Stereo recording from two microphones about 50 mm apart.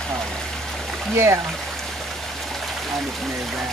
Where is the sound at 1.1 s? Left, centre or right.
Right.